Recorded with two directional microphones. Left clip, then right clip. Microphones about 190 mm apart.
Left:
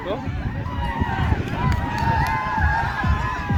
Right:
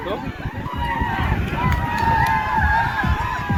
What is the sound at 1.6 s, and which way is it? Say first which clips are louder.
Run: right 4 dB; 35° left (ahead or behind).